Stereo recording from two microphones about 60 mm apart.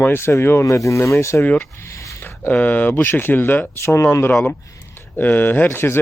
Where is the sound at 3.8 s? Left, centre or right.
Left.